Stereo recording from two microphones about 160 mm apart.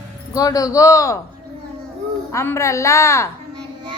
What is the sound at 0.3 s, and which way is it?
Speech, 20° left (ahead or behind).